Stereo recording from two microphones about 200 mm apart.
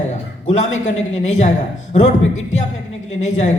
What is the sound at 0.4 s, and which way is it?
A man's voice, 35° left (ahead or behind).